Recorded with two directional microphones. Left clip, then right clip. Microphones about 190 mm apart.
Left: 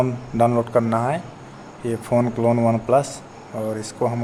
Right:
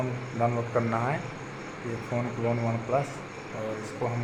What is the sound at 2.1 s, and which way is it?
Speech, 70° left (ahead or behind).